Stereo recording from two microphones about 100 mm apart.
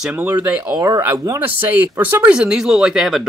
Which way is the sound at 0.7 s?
40° right (ahead or behind).